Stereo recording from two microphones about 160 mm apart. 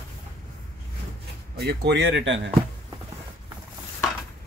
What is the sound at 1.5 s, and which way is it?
Speech, 90° right.